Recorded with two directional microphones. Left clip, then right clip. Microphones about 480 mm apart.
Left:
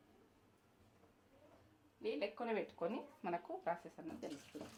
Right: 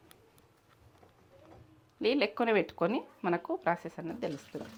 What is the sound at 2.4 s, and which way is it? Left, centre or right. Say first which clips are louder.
Speech: right 13 dB; right.